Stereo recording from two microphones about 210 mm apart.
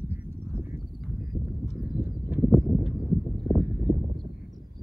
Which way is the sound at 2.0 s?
5° right (ahead or behind).